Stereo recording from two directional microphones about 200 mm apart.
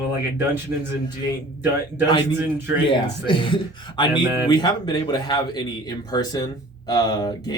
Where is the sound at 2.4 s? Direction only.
10° right (ahead or behind).